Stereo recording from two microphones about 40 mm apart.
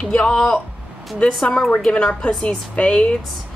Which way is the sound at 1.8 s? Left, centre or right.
Left.